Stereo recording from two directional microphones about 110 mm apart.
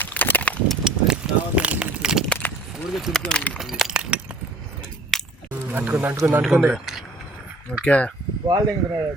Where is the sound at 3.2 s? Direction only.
10° left (ahead or behind).